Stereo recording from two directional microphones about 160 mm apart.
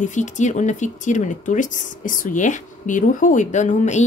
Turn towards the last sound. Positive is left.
turn(degrees=50)  # may be behind; listen again after turning